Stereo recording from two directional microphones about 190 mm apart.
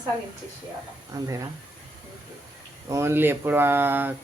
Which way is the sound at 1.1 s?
20° right (ahead or behind).